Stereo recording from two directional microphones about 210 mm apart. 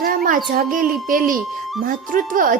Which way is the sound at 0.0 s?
40° right (ahead or behind).